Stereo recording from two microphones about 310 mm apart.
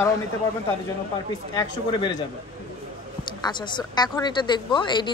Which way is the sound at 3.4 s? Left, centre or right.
Centre.